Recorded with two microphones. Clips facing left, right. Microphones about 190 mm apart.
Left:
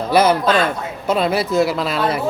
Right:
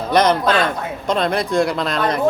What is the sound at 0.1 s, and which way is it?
Speech, 5° left (ahead or behind).